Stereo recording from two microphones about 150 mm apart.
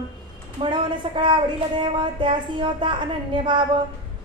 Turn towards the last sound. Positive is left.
turn(degrees=-35)  # may be behind; listen again after turning